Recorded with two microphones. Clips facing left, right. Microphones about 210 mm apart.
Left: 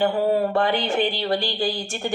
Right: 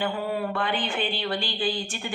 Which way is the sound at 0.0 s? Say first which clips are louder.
Left 8 dB; 40° left (ahead or behind).